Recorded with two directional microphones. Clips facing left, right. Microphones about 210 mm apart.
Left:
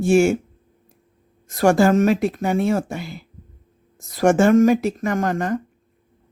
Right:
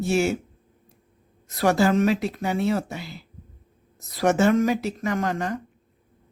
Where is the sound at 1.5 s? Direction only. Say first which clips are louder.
Left 5 dB; 50° left (ahead or behind).